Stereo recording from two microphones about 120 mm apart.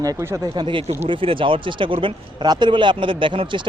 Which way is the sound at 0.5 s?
40° right (ahead or behind).